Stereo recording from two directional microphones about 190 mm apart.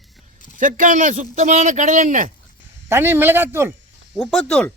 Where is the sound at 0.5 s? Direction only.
45° right (ahead or behind).